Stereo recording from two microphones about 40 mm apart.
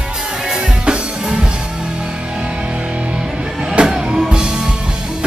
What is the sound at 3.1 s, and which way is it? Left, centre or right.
Music, right.